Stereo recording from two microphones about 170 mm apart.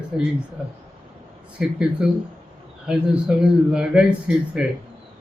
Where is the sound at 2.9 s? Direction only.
5° right (ahead or behind).